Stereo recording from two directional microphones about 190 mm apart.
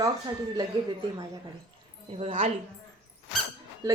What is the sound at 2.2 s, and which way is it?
Speech, 40° right (ahead or behind).